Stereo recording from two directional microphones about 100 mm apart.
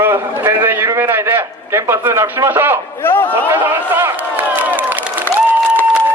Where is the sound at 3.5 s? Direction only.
25° right (ahead or behind).